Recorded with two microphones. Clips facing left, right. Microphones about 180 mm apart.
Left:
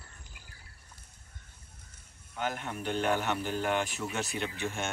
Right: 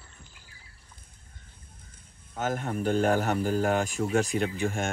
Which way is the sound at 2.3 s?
45° right (ahead or behind).